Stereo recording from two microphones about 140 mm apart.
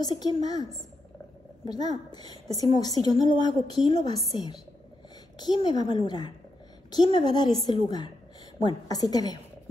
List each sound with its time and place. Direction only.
0.0 s a woman's voice: 30° left (ahead or behind)
3.9 s a woman's voice: 45° right (ahead or behind)
5.4 s a woman's voice: 30° left (ahead or behind)